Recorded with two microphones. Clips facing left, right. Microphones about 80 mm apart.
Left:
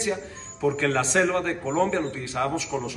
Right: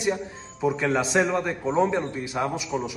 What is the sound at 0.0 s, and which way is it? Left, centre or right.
A man's voice, centre.